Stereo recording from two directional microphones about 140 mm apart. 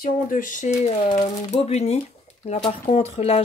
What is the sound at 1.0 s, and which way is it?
Speech, 35° left (ahead or behind).